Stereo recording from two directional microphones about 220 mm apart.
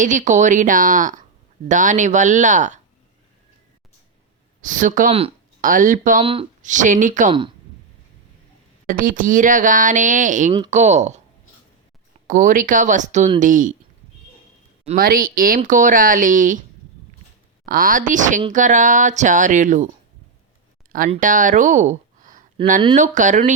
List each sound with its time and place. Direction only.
0.0 s speech: 35° right (ahead or behind)
4.6 s speech: 35° right (ahead or behind)
6.2 s speech: 25° right (ahead or behind)
8.9 s speech: 40° right (ahead or behind)
12.3 s speech: 35° right (ahead or behind)
14.9 s speech: 40° right (ahead or behind)
17.7 s speech: 40° right (ahead or behind)
21.1 s speech: 35° right (ahead or behind)